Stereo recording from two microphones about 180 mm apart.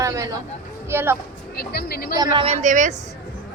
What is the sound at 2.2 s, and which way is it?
Speech, 30° right (ahead or behind).